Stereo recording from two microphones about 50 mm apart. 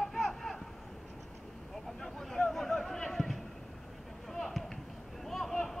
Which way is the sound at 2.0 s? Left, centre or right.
Centre.